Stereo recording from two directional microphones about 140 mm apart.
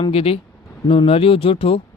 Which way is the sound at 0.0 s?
45° left (ahead or behind).